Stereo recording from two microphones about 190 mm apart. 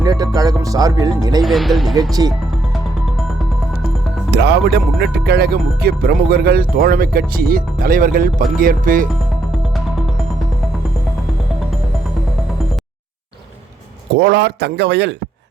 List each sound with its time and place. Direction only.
0.0 s music: 20° right (ahead or behind)
1.4 s speech: centre (ahead or behind)
4.3 s speech: 60° right (ahead or behind); by 9.0 s 45° right (ahead or behind)
14.2 s a man's voice: 60° right (ahead or behind)